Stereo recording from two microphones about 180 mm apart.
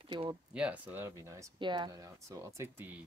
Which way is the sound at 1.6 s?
25° right (ahead or behind).